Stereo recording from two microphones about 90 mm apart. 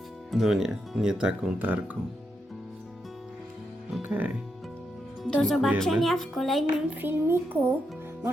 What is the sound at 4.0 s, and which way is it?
Speech, 20° right (ahead or behind).